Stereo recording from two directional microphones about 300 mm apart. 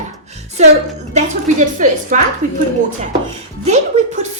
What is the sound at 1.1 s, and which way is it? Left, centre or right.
Speech, right.